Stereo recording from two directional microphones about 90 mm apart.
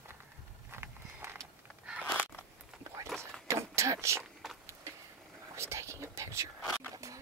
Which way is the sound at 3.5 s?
30° right (ahead or behind).